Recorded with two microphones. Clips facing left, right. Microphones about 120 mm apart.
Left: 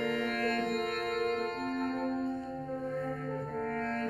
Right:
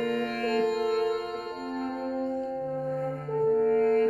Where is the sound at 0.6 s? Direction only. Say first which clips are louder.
Right 7 dB; centre (ahead or behind).